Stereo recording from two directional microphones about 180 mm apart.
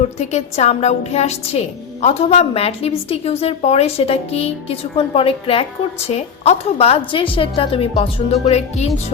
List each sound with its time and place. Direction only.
0.2 s a woman's voice: 40° left (ahead or behind)